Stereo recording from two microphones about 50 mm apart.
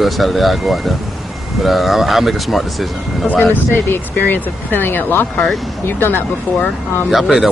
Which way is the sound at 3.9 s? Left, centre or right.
Left.